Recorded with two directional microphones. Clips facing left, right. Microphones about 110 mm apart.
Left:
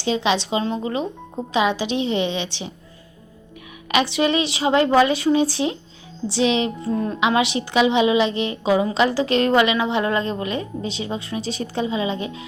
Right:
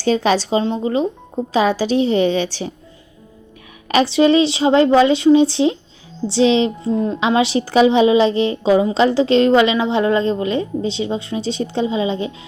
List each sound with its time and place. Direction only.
0.0 s a woman's voice: 45° right (ahead or behind)
3.8 s a woman's voice: 35° right (ahead or behind)